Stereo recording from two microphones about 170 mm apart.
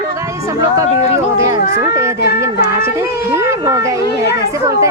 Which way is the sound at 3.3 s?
15° right (ahead or behind).